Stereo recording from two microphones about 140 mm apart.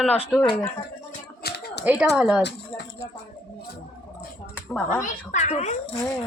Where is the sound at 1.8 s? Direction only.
10° right (ahead or behind).